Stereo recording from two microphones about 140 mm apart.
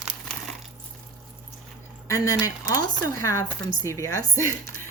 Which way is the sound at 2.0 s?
25° left (ahead or behind).